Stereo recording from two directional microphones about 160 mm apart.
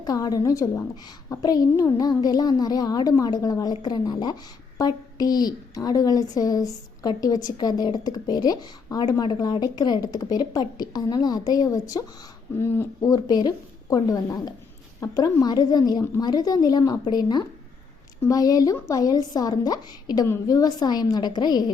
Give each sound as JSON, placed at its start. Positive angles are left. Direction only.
{"t": 0.0, "sound": "a woman's voice", "side_deg": 20}